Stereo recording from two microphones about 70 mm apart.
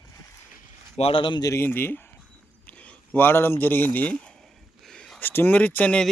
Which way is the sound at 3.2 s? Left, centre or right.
Left.